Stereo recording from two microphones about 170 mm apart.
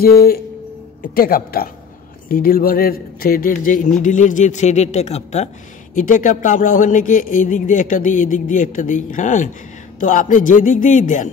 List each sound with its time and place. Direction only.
1.0 s a man's voice: 60° left (ahead or behind)